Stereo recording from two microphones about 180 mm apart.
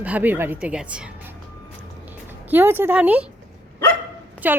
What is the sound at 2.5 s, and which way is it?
Speech, 10° right (ahead or behind).